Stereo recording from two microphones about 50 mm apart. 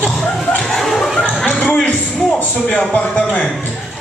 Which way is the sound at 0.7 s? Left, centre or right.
Centre.